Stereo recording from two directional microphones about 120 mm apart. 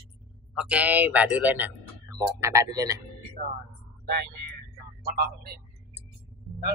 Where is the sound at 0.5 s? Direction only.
10° right (ahead or behind).